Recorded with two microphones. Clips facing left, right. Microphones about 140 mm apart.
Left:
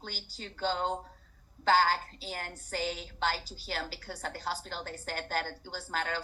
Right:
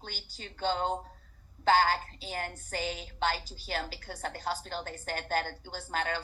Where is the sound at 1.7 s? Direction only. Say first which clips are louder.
Right 1 dB; 50° right (ahead or behind).